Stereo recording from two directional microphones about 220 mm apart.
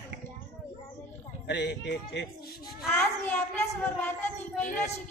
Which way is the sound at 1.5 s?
50° left (ahead or behind).